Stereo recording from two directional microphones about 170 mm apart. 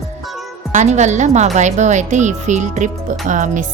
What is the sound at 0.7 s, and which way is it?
A woman's voice, 45° right (ahead or behind).